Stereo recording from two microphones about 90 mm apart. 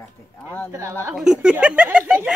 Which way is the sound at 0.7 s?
35° right (ahead or behind).